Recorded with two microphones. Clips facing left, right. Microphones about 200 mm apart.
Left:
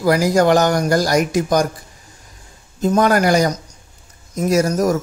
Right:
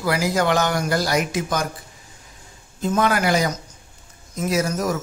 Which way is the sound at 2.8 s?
40° left (ahead or behind).